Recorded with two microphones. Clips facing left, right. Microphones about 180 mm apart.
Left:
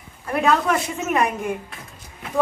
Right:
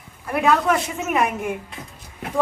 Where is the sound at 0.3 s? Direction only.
5° right (ahead or behind).